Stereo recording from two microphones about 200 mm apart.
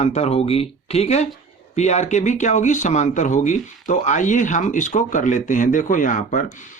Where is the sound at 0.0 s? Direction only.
35° left (ahead or behind).